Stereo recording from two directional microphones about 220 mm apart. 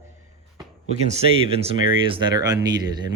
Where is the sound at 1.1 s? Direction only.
25° right (ahead or behind).